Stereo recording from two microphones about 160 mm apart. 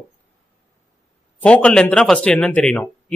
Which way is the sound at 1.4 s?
5° left (ahead or behind).